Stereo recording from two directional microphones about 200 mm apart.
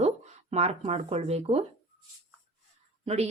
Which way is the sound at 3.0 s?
30° right (ahead or behind).